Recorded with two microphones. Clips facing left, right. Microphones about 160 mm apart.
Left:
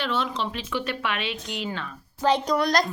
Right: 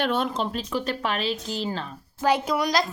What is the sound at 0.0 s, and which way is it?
Speech, 50° right (ahead or behind).